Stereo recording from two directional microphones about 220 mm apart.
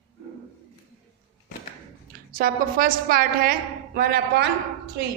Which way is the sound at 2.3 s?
40° right (ahead or behind).